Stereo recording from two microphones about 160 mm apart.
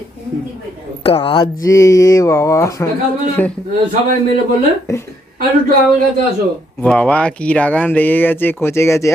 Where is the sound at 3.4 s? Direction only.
10° left (ahead or behind).